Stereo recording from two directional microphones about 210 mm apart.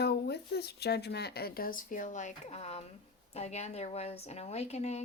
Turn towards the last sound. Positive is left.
turn(degrees=30)  # may be behind; listen again after turning